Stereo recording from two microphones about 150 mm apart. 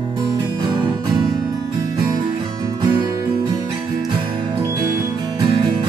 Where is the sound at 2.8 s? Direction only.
30° right (ahead or behind).